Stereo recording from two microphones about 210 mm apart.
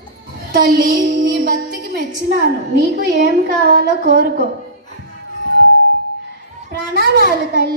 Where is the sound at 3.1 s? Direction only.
45° right (ahead or behind).